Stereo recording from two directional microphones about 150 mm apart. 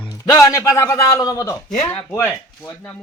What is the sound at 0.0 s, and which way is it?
A man's voice, 20° left (ahead or behind).